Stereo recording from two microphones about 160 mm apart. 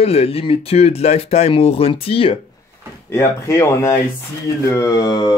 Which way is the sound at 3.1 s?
15° left (ahead or behind).